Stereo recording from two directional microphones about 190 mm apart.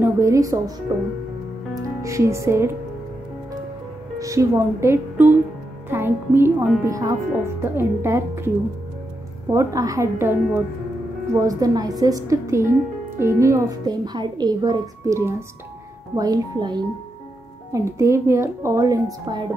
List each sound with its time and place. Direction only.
0.0 s speech: 15° right (ahead or behind)
1.8 s speech: 15° right (ahead or behind)
4.2 s speech: 15° right (ahead or behind)
9.5 s speech: 15° right (ahead or behind)